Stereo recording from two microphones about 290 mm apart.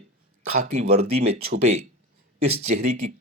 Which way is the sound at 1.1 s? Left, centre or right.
Right.